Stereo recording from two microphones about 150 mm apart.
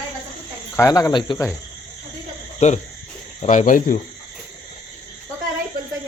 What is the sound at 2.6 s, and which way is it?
Speech, 50° left (ahead or behind).